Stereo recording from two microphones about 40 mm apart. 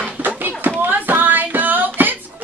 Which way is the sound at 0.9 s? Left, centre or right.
Right.